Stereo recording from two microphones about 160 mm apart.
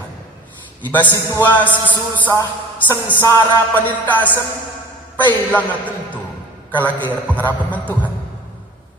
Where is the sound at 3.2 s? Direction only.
20° left (ahead or behind).